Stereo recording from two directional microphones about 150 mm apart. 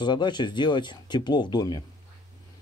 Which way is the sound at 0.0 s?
30° left (ahead or behind).